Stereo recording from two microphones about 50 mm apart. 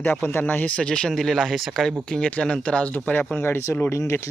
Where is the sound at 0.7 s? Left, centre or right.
Centre.